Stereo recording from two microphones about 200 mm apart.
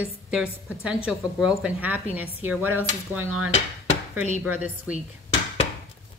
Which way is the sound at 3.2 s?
90° right.